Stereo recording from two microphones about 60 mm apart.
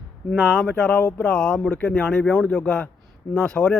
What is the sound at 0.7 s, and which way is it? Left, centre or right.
Speech, centre.